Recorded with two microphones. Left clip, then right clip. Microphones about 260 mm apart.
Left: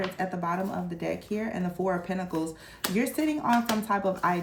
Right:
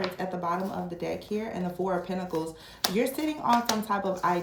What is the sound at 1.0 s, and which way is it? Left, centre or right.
Speech, left.